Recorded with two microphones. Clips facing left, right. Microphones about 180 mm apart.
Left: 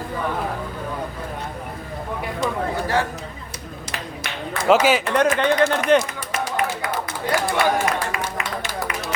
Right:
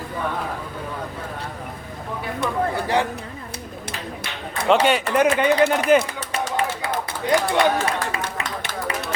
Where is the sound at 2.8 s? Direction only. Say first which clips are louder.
Left 1 dB; 15° right (ahead or behind).